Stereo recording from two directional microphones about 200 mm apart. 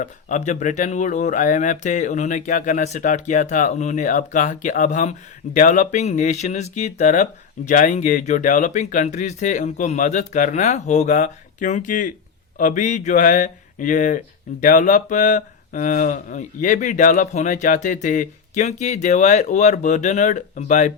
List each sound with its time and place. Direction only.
0.0 s speech: 40° left (ahead or behind)